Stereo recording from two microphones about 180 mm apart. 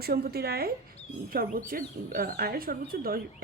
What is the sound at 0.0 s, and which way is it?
Speech, 60° right (ahead or behind).